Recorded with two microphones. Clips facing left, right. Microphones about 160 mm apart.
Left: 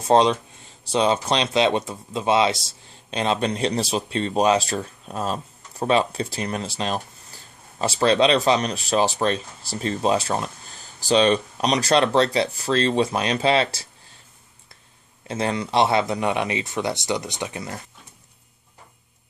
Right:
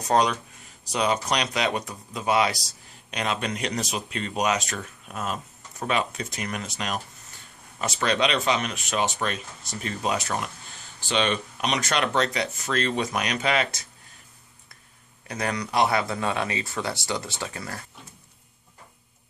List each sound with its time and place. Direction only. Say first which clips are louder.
0.0 s speech: left 5 dB; 25° left (ahead or behind)
15.2 s speech: left 4 dB; 25° left (ahead or behind)